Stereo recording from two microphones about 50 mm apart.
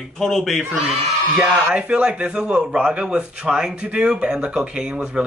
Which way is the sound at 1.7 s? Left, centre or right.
Centre.